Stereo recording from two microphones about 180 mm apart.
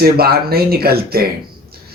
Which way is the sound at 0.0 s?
60° right (ahead or behind).